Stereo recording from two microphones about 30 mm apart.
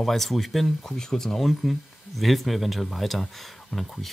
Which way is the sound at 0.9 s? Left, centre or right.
Centre.